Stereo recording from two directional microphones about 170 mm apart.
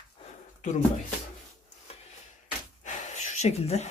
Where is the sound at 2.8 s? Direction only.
45° left (ahead or behind).